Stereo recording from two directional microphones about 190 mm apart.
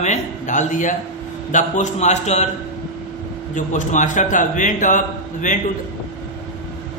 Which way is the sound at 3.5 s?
40° left (ahead or behind).